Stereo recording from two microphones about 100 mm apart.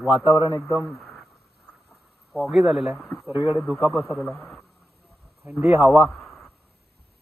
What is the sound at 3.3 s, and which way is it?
Speech, 55° left (ahead or behind).